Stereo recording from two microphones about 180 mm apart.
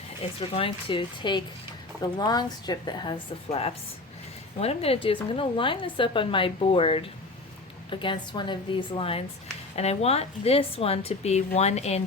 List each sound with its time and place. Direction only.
0.3 s a woman's voice: 30° left (ahead or behind)